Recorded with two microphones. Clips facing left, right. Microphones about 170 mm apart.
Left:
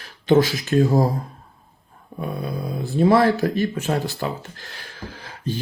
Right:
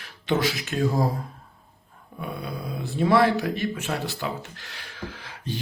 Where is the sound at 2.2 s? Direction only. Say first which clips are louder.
Left 5 dB; 40° left (ahead or behind).